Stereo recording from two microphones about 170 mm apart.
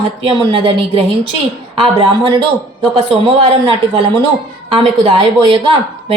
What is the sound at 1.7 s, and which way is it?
A woman's voice, 30° right (ahead or behind).